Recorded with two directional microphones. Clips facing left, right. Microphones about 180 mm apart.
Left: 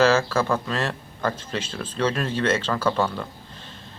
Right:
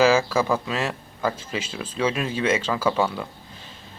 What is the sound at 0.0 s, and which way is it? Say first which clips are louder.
Speech: right 1 dB; 10° right (ahead or behind).